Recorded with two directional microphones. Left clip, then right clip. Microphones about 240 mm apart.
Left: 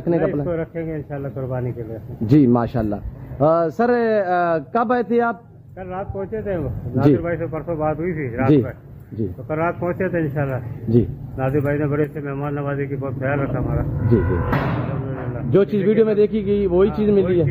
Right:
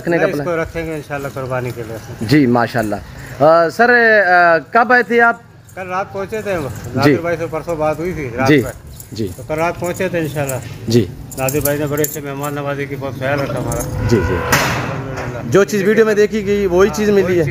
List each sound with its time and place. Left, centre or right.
0.0 s speech: centre
8.5 s speech: centre
9.5 s speech: centre
14.0 s speech: right
15.5 s speech: centre